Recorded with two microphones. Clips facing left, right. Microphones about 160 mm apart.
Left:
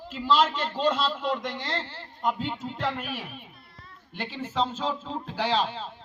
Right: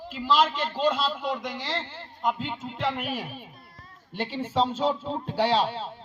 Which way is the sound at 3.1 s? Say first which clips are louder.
Right 3 dB; 40° right (ahead or behind).